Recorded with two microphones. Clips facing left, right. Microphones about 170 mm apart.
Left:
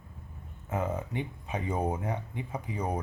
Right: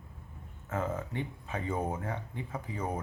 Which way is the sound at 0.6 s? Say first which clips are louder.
Left 2 dB; 15° left (ahead or behind).